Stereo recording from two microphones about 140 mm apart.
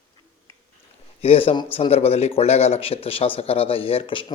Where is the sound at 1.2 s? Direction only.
45° left (ahead or behind).